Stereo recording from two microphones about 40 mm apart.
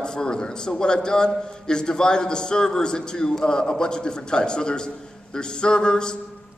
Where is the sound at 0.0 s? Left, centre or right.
Centre.